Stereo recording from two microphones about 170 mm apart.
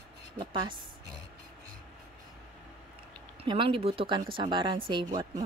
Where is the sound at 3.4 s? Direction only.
30° right (ahead or behind).